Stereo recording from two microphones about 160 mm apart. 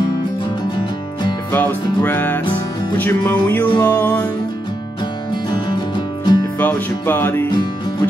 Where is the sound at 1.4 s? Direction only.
10° left (ahead or behind).